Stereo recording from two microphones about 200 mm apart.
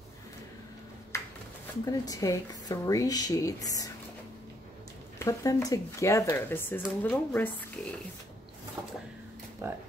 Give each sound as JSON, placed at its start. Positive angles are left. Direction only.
{"t": 1.9, "sound": "speech", "side_deg": 15}
{"t": 5.2, "sound": "speech", "side_deg": 15}
{"t": 8.8, "sound": "a sound", "side_deg": -15}
{"t": 9.6, "sound": "speech", "side_deg": -15}